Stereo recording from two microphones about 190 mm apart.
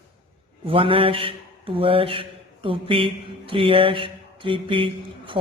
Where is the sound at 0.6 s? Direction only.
30° right (ahead or behind).